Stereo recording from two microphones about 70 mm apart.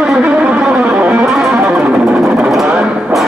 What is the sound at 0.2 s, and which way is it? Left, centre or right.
Guitar, centre.